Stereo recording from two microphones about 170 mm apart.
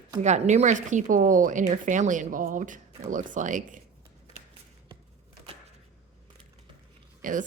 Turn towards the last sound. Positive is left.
turn(degrees=-50)  # may be behind; listen again after turning